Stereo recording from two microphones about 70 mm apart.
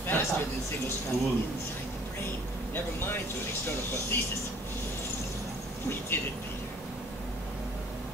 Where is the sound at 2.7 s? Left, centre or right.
Left.